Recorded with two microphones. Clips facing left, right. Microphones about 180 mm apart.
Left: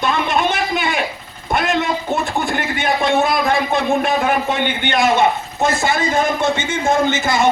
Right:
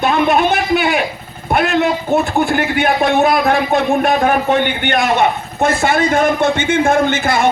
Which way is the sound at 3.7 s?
45° right (ahead or behind).